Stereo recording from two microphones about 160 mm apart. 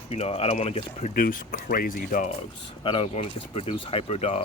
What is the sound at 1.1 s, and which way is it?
Speech, 65° left (ahead or behind).